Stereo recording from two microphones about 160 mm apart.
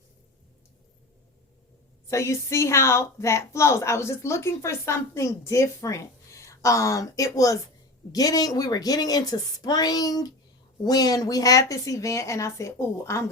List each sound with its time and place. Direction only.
2.0 s a woman's voice: 20° left (ahead or behind)